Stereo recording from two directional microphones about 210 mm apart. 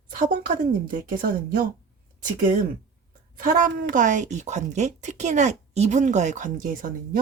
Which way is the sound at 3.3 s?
40° right (ahead or behind).